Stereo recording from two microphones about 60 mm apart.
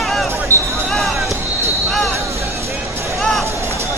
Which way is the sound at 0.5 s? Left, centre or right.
Left.